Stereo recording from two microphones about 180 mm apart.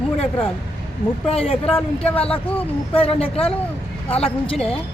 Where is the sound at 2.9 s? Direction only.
30° left (ahead or behind).